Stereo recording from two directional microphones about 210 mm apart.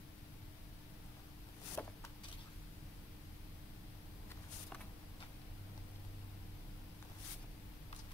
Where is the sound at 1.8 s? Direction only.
5° left (ahead or behind).